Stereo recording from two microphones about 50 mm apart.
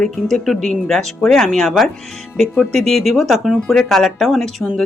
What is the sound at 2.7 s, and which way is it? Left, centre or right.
Speech, centre.